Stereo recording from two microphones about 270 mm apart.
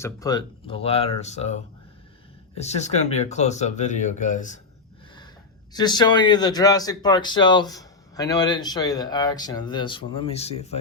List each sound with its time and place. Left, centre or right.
0.0 s speech: centre
5.7 s speech: centre